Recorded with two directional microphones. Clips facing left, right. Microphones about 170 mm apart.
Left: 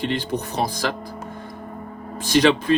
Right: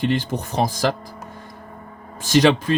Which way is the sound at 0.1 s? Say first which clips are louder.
Right 2 dB; 50° right (ahead or behind).